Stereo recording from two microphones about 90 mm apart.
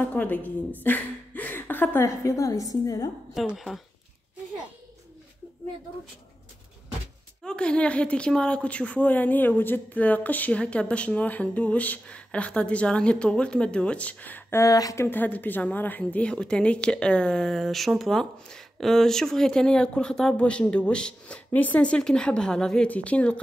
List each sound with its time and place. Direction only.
0.0 s a woman's voice: 20° left (ahead or behind); by 3.1 s 40° left (ahead or behind)
3.3 s a woman's voice: centre (ahead or behind)
7.4 s a woman's voice: 10° left (ahead or behind)
14.5 s a woman's voice: 40° left (ahead or behind)
15.0 s a woman's voice: 20° left (ahead or behind)